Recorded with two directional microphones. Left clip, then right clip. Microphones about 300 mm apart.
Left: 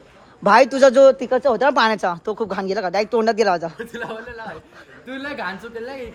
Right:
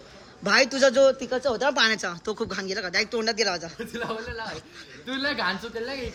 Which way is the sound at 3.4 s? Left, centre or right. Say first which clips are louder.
Left 8 dB; left.